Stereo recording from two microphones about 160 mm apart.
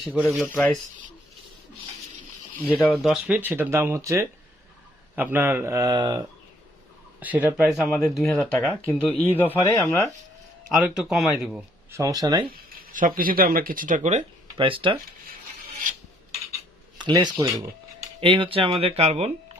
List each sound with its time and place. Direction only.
0.2 s speech: 5° left (ahead or behind)
2.8 s speech: centre (ahead or behind); by 6.2 s 25° right (ahead or behind)
7.2 s speech: 10° right (ahead or behind)
9.6 s speech: 20° left (ahead or behind)
10.7 s speech: 5° right (ahead or behind)
11.9 s speech: 20° right (ahead or behind)
12.9 s speech: 55° right (ahead or behind)
14.5 s speech: 30° right (ahead or behind)
17.0 s speech: 25° right (ahead or behind)
18.2 s speech: 30° right (ahead or behind)